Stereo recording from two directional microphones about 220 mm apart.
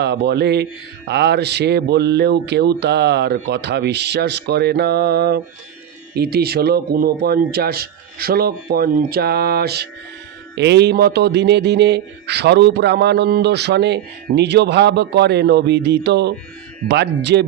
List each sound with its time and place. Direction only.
0.0 s a man's voice: 50° right (ahead or behind)